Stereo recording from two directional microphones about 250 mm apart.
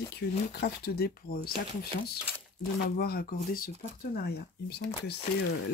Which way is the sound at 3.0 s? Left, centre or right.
Left.